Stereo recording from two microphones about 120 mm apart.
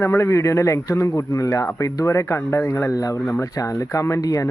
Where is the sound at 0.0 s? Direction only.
20° left (ahead or behind).